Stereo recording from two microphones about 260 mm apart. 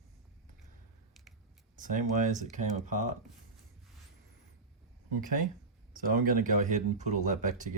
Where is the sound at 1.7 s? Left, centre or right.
Right.